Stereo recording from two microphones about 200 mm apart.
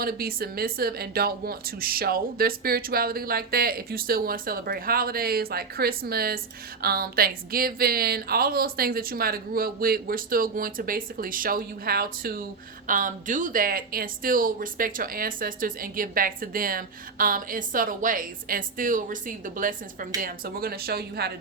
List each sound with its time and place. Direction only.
0.0 s speech: 50° right (ahead or behind)